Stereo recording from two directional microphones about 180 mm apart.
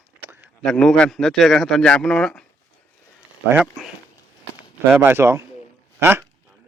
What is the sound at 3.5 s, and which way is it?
A man's voice, 5° right (ahead or behind).